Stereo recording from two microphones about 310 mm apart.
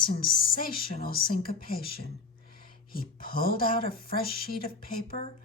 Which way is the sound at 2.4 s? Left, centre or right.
Left.